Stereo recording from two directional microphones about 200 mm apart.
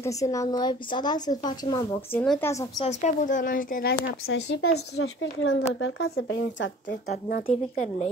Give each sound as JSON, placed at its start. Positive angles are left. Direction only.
{"t": 0.0, "sound": "speech", "side_deg": 15}
{"t": 2.1, "sound": "speech", "side_deg": 5}
{"t": 2.8, "sound": "speech", "side_deg": 35}
{"t": 4.3, "sound": "a woman's voice", "side_deg": 80}
{"t": 5.8, "sound": "speech", "side_deg": 90}
{"t": 7.4, "sound": "speech", "side_deg": 35}